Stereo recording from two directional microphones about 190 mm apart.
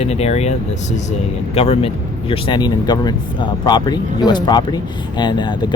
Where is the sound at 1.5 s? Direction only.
30° left (ahead or behind).